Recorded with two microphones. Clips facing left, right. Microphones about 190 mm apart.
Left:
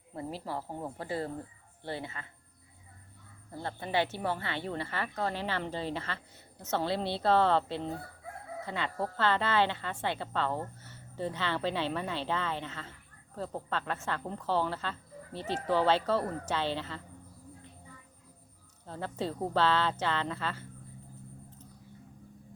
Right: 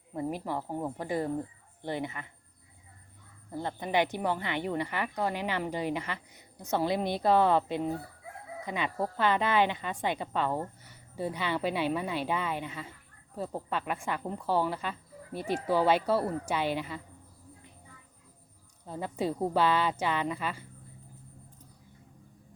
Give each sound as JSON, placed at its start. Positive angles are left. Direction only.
{"t": 0.2, "sound": "a woman's voice", "side_deg": -15}
{"t": 3.5, "sound": "a woman's voice", "side_deg": -20}
{"t": 18.9, "sound": "a woman's voice", "side_deg": -15}